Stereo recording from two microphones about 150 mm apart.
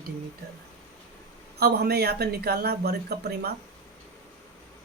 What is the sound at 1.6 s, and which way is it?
Speech, 90° right.